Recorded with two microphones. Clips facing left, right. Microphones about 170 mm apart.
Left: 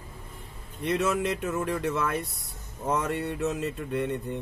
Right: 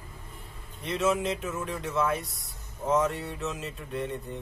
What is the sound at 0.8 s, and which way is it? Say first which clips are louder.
Speech: left 1 dB; 55° left (ahead or behind).